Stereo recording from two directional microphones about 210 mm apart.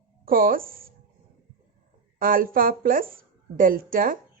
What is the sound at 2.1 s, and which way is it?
A woman's voice, 40° right (ahead or behind).